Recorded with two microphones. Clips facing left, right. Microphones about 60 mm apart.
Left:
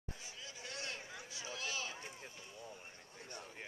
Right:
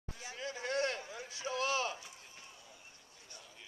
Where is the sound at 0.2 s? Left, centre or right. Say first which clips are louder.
Right 9 dB; right.